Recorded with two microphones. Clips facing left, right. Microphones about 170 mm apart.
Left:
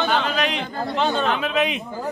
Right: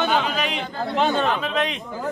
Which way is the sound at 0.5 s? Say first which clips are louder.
Right 1 dB; 50° right (ahead or behind).